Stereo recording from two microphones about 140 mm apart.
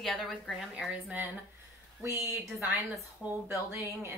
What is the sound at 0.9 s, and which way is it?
Speech, 10° right (ahead or behind).